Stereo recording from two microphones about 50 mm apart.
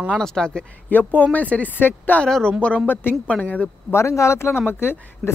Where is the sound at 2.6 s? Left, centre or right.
Left.